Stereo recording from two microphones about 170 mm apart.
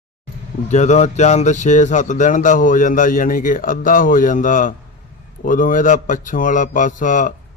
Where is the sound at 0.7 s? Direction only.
45° left (ahead or behind).